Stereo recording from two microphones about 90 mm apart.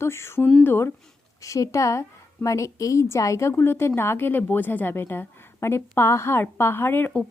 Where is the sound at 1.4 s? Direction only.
35° left (ahead or behind).